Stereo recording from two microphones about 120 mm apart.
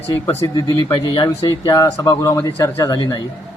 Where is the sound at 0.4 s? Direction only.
35° left (ahead or behind).